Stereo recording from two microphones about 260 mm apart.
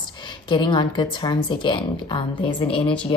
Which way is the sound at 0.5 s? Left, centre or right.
Centre.